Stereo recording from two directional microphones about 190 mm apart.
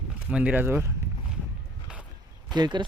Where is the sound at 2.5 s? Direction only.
25° right (ahead or behind).